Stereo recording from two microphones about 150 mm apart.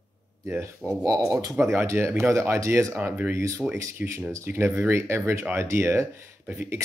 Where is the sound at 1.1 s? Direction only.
20° right (ahead or behind).